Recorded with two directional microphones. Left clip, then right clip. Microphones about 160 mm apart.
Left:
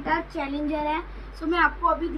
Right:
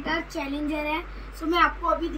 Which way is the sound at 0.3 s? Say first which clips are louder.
Left 1 dB; 10° right (ahead or behind).